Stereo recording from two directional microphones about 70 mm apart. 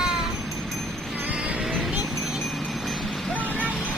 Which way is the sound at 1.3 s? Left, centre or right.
Centre.